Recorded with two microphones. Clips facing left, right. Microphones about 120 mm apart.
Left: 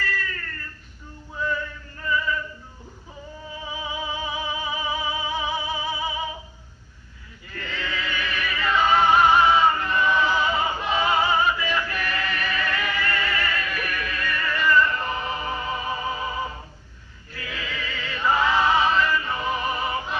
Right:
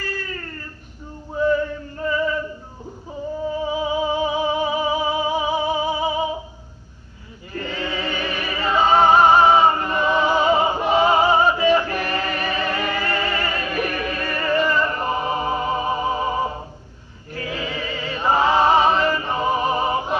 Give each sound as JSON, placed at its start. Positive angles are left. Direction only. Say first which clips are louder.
{"t": 0.1, "sound": "a sound", "louder": "right 1 dB", "side_deg": -30}
{"t": 1.3, "sound": "music", "louder": "right 9 dB", "side_deg": -35}
{"t": 3.5, "sound": "music", "louder": "right 9 dB", "side_deg": -35}
{"t": 7.5, "sound": "music", "louder": "right 5 dB", "side_deg": -30}
{"t": 17.3, "sound": "choir", "louder": "right 6 dB", "side_deg": -35}